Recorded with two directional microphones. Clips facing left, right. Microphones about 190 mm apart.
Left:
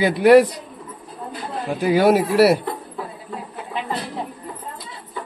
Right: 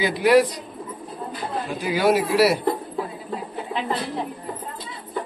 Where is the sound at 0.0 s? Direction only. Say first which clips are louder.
Left 5 dB; 55° left (ahead or behind).